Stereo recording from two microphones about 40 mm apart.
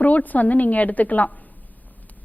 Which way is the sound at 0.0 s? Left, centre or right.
Left.